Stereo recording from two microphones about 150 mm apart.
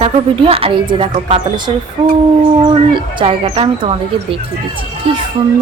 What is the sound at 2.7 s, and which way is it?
Speech, 35° right (ahead or behind).